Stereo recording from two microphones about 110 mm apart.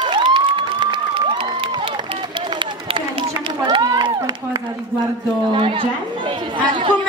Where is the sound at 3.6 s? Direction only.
40° right (ahead or behind).